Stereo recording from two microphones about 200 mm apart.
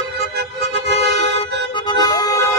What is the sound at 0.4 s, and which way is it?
Music, 55° right (ahead or behind).